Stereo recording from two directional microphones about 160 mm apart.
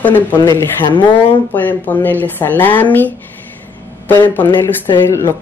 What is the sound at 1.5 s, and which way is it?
A woman's voice, 10° left (ahead or behind).